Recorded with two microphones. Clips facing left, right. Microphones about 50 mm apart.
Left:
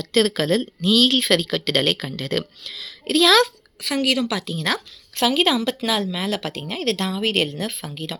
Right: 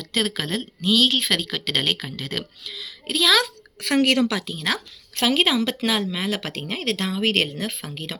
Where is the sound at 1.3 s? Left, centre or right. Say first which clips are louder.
Left 4 dB; centre.